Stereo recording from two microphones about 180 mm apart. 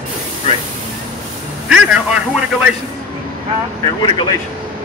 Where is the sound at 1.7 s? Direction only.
5° right (ahead or behind).